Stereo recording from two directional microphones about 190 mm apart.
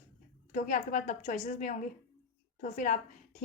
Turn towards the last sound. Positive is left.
turn(degrees=40)  # may be behind; listen again after turning